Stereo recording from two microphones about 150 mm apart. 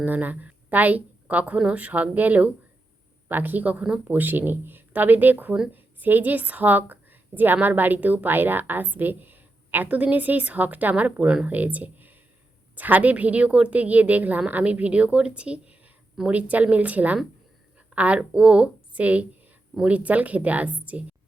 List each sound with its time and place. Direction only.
0.0 s a woman's voice: 10° right (ahead or behind)